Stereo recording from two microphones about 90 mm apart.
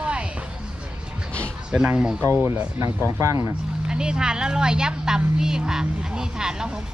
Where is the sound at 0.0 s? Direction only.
10° right (ahead or behind).